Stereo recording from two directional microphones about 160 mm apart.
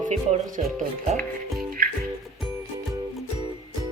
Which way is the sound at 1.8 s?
65° right (ahead or behind).